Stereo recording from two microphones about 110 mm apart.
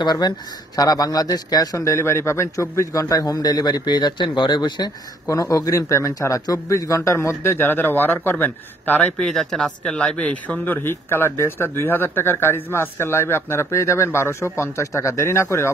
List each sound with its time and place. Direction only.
0.0 s a man's voice: 40° left (ahead or behind)
5.2 s speech: 30° left (ahead or behind)
9.2 s speech: 5° left (ahead or behind); by 15.7 s 25° left (ahead or behind)